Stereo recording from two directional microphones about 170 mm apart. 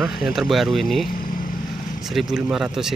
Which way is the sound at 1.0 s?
55° left (ahead or behind).